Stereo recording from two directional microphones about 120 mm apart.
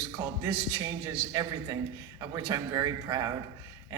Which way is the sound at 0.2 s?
25° right (ahead or behind).